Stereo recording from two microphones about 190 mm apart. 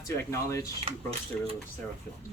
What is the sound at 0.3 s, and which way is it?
Speech, 15° left (ahead or behind).